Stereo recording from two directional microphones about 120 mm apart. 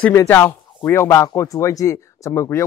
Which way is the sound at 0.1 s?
25° left (ahead or behind).